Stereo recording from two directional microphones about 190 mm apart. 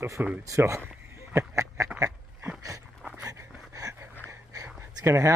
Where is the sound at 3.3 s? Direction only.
15° right (ahead or behind).